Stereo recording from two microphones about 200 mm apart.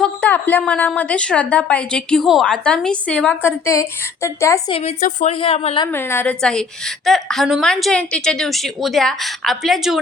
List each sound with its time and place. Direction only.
0.0 s a woman's voice: 10° left (ahead or behind)
4.7 s a woman's voice: 30° left (ahead or behind)
5.9 s a woman's voice: 10° left (ahead or behind)